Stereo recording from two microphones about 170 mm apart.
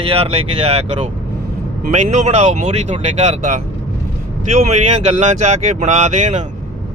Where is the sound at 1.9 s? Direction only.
45° right (ahead or behind).